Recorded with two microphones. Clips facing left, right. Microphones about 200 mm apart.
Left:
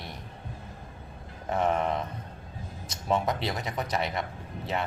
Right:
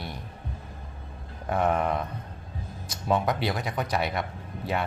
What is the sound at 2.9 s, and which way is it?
Speech, 25° left (ahead or behind).